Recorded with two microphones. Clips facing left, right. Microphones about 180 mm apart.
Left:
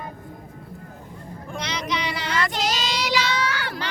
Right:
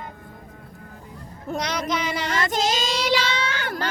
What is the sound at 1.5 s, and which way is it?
Child singing, 45° right (ahead or behind).